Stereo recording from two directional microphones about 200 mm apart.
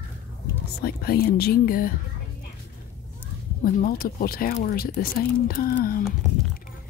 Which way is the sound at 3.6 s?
45° left (ahead or behind).